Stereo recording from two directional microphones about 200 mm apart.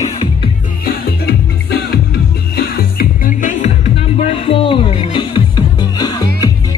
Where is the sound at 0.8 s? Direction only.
55° left (ahead or behind).